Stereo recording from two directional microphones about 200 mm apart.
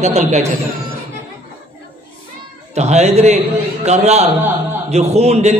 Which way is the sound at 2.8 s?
35° right (ahead or behind).